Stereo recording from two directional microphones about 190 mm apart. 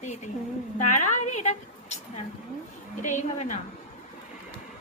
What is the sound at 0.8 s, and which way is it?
Speech, 40° left (ahead or behind).